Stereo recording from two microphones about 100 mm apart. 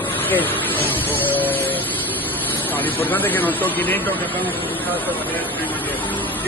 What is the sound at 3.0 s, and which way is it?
Speech, 20° left (ahead or behind).